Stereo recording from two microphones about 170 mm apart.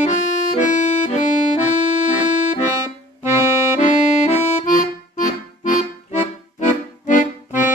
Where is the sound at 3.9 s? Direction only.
45° left (ahead or behind).